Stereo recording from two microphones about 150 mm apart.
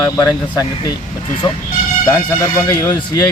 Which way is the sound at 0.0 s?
20° left (ahead or behind).